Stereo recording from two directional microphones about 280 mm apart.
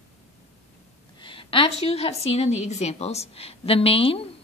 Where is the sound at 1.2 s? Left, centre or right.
Centre.